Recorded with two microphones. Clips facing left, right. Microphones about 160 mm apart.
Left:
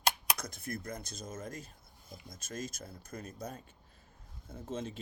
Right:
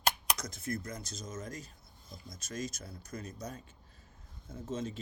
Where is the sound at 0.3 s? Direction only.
55° left (ahead or behind).